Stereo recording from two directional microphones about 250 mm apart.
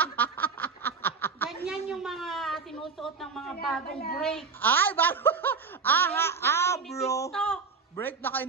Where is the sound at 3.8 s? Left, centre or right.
Left.